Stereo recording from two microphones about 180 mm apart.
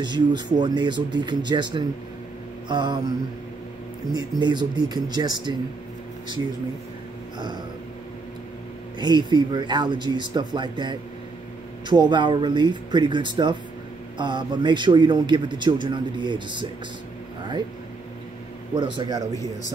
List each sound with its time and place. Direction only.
0.0 s a man's voice: 25° right (ahead or behind)
4.1 s a man's voice: 25° right (ahead or behind)
7.3 s a man's voice: 25° right (ahead or behind)
9.0 s a man's voice: 25° right (ahead or behind)
18.9 s a man's voice: 20° right (ahead or behind)